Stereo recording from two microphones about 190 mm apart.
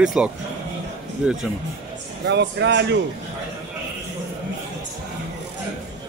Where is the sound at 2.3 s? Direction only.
65° right (ahead or behind).